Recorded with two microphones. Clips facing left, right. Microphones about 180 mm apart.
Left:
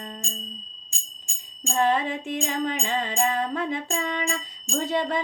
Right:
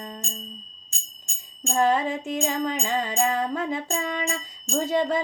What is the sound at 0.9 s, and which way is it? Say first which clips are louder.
Music: even; 65° right (ahead or behind).